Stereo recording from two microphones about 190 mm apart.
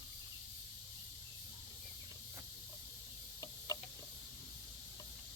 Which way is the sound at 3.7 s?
20° left (ahead or behind).